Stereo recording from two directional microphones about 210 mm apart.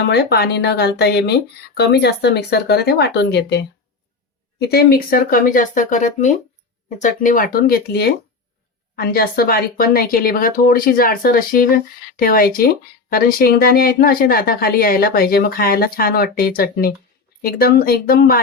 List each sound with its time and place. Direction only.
0.1 s speech: 50° left (ahead or behind)
4.7 s speech: 45° left (ahead or behind)